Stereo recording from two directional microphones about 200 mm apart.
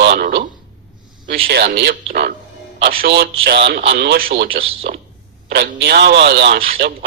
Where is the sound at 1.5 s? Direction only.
55° right (ahead or behind).